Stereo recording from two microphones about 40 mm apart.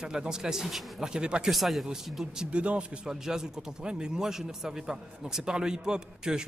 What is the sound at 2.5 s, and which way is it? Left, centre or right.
Speech, right.